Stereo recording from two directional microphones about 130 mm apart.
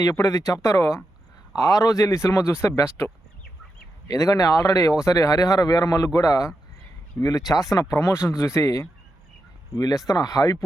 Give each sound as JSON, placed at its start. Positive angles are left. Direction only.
{"t": 0.0, "sound": "speech", "side_deg": 25}
{"t": 4.1, "sound": "speech", "side_deg": 25}